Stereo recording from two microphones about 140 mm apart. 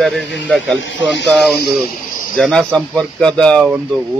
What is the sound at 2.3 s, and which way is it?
Speech, 5° left (ahead or behind).